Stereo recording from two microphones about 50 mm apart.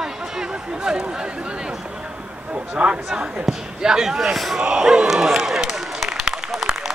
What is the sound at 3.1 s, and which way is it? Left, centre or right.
Speech, centre.